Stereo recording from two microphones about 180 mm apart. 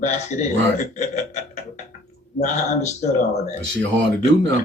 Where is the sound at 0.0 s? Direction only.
40° left (ahead or behind).